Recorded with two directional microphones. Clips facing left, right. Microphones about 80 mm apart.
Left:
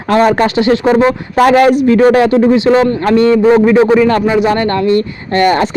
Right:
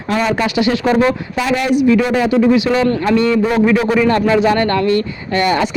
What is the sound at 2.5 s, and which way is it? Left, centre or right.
Speech, left.